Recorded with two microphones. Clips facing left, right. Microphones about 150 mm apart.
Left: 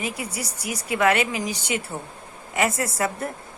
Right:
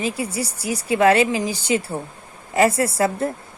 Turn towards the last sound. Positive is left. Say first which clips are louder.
# right 6 dB
turn(degrees=-30)  # may be behind; listen again after turning